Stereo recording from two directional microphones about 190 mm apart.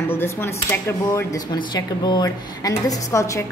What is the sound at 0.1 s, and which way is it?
A woman's voice, 10° left (ahead or behind).